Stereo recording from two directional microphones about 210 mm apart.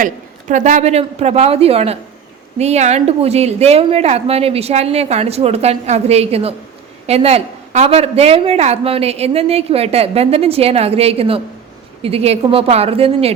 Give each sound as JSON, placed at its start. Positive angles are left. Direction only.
{"t": 0.0, "sound": "a woman's voice", "side_deg": -35}